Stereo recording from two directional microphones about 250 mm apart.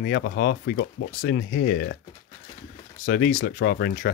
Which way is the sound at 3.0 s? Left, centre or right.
Left.